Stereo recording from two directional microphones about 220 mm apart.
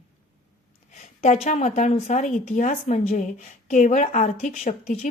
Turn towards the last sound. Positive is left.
turn(degrees=30)  # may be behind; listen again after turning